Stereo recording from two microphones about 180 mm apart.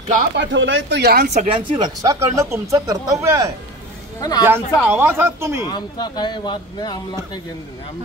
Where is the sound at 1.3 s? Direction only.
40° right (ahead or behind).